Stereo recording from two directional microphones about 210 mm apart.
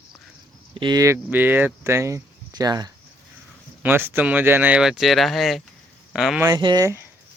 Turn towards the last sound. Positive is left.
turn(degrees=-15)  # may be behind; listen again after turning